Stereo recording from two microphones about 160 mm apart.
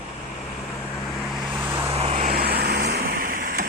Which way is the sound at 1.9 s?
40° right (ahead or behind).